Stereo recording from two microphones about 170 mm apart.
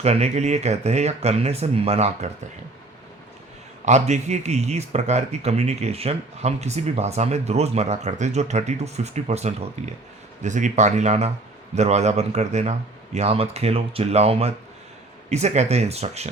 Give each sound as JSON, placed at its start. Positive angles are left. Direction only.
{"t": 0.0, "sound": "a man's voice", "side_deg": -40}
{"t": 3.8, "sound": "a man's voice", "side_deg": -40}